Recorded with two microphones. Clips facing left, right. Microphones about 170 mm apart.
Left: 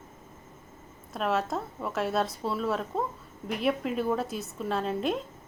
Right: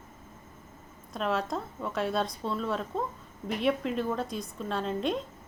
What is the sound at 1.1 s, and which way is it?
Speech, centre (ahead or behind).